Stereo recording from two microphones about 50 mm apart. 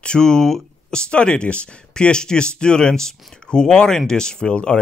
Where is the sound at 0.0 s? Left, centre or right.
Centre.